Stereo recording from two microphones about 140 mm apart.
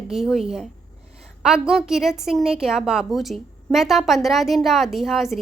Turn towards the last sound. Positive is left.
turn(degrees=0)  # may be behind; listen again after turning